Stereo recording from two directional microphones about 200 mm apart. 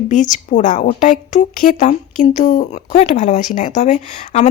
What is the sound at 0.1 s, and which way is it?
A woman's voice, 40° left (ahead or behind).